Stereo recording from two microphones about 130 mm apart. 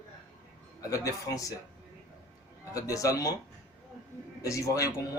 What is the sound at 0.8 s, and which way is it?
Speech, 25° left (ahead or behind).